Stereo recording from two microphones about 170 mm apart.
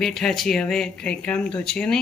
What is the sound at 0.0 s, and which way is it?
Speech, centre (ahead or behind).